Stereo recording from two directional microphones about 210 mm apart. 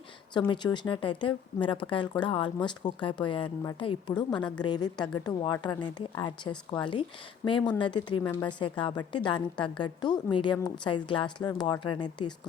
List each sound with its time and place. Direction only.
0.3 s speech: 20° left (ahead or behind)